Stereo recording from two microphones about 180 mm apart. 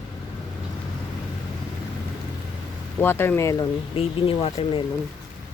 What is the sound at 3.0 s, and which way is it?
Speech, 10° left (ahead or behind).